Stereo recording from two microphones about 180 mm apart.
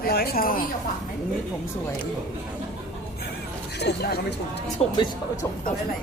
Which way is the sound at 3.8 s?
60° left (ahead or behind).